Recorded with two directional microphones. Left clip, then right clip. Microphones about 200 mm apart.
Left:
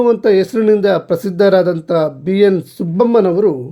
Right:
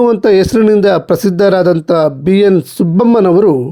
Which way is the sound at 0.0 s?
35° right (ahead or behind).